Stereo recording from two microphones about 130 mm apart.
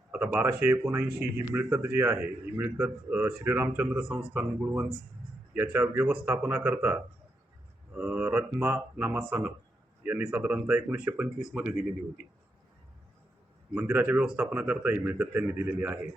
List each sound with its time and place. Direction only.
0.1 s a man's voice: 10° right (ahead or behind)
13.7 s a man's voice: 10° right (ahead or behind)